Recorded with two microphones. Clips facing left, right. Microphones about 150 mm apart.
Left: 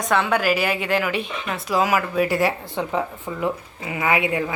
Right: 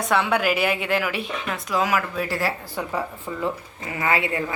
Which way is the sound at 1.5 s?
5° left (ahead or behind).